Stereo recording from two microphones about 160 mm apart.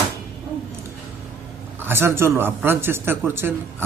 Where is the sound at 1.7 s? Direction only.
15° right (ahead or behind).